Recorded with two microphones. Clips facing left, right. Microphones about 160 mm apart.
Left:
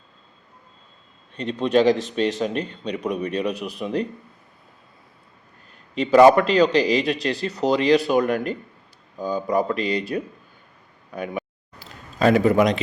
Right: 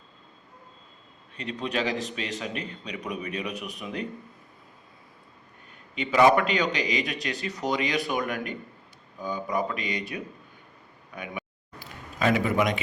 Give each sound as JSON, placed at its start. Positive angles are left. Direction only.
{"t": 1.4, "sound": "a man's voice", "side_deg": 30}
{"t": 6.0, "sound": "speech", "side_deg": 35}